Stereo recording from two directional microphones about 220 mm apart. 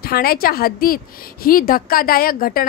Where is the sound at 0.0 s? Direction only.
45° left (ahead or behind).